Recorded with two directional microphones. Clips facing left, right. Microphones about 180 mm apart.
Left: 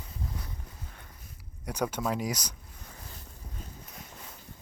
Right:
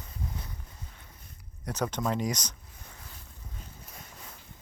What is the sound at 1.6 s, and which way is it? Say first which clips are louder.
Speech: even; 10° left (ahead or behind).